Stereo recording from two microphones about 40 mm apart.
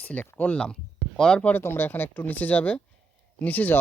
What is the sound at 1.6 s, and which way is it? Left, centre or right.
Speech, left.